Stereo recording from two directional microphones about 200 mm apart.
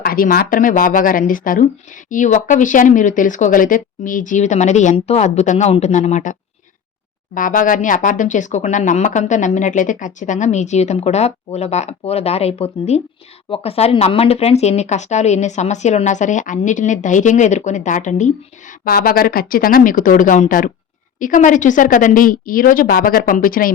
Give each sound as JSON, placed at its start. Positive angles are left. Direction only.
{"t": 0.0, "sound": "speech", "side_deg": 45}
{"t": 7.3, "sound": "speech", "side_deg": 40}
{"t": 18.9, "sound": "speech", "side_deg": 50}